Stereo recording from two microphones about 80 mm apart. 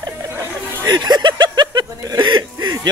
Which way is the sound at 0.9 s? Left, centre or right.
Right.